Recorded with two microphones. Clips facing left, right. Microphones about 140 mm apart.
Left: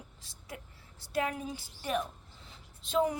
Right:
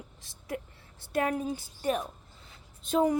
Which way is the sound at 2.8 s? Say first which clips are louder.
Right 4 dB; 45° right (ahead or behind).